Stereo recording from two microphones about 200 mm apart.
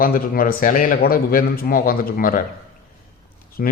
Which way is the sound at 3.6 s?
45° left (ahead or behind).